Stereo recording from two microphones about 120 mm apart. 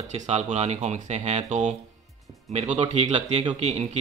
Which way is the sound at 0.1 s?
70° right (ahead or behind).